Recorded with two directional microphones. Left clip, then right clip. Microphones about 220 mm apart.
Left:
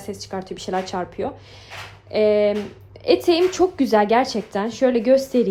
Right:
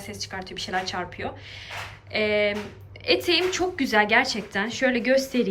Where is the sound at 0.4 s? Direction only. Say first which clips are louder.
Left 2 dB; 30° left (ahead or behind).